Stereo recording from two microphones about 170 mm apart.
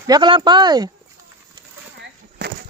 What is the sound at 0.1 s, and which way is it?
Speech, 30° right (ahead or behind).